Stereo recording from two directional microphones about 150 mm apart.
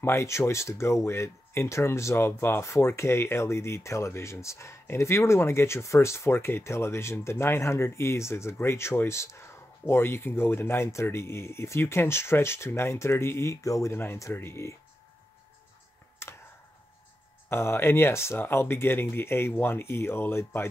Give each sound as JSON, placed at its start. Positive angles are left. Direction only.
{"t": 0.0, "sound": "speech", "side_deg": 20}
{"t": 17.5, "sound": "speech", "side_deg": 15}